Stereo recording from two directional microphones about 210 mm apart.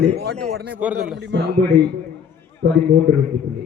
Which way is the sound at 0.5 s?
50° right (ahead or behind).